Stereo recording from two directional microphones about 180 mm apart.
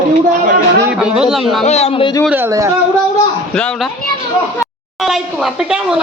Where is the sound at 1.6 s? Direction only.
35° left (ahead or behind).